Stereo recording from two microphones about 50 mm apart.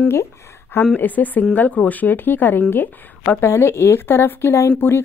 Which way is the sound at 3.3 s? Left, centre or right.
Left.